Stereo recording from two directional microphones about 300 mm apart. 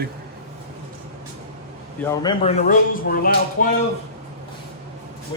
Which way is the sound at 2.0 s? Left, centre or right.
Centre.